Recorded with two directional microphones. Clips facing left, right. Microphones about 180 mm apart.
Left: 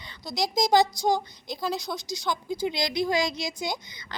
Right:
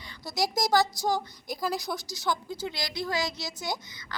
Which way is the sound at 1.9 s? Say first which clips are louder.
Left 1 dB; 20° left (ahead or behind).